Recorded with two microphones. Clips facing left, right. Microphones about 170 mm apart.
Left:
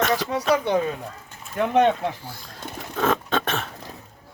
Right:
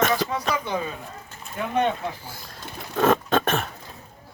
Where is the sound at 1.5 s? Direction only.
80° left.